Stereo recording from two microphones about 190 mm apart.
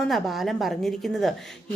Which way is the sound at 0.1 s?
Centre (ahead or behind).